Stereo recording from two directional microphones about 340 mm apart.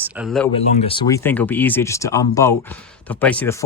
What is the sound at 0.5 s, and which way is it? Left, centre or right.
Speech, centre.